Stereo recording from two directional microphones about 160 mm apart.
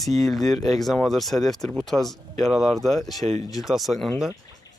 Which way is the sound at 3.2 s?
45° right (ahead or behind).